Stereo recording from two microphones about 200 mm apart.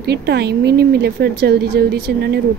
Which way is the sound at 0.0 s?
55° right (ahead or behind).